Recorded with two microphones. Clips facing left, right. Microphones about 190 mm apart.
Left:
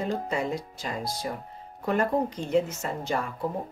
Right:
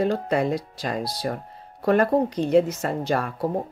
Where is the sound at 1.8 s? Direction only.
80° right.